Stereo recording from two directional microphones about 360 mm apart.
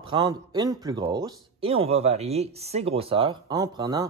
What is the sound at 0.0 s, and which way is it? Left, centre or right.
Speech, centre.